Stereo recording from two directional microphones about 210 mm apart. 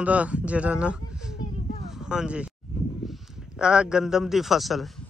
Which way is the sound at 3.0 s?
Centre (ahead or behind).